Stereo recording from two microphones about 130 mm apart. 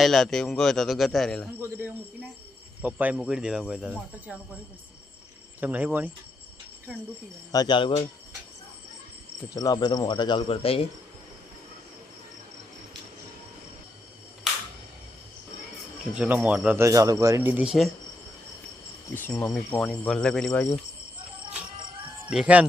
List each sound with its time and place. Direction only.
0.0 s speech: centre (ahead or behind)
1.5 s speech: 15° right (ahead or behind)
5.5 s speech: 10° right (ahead or behind)
7.5 s speech: 35° left (ahead or behind)
9.6 s speech: 30° left (ahead or behind); by 10.8 s 45° left (ahead or behind)
16.1 s speech: 10° right (ahead or behind)
19.1 s speech: 15° left (ahead or behind)
22.3 s speech: 5° right (ahead or behind)